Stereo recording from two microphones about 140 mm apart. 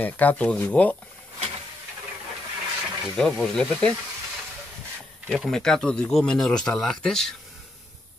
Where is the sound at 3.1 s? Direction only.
5° left (ahead or behind).